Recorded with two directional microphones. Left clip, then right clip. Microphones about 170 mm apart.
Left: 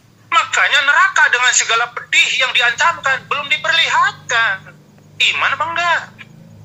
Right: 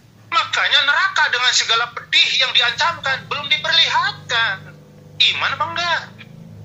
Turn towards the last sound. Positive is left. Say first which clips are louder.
# left 4 dB
turn(degrees=10)  # may be behind; listen again after turning